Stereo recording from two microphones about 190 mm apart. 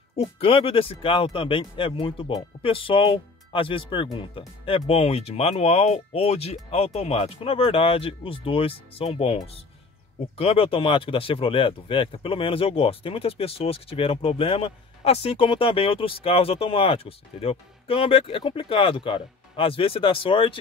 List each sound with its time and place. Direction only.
0.1 s speech: 30° left (ahead or behind)